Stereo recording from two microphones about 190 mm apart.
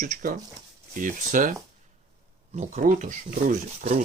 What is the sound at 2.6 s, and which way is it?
Speech, 40° right (ahead or behind).